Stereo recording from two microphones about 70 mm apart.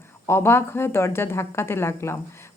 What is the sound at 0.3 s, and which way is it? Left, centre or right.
Speech, left.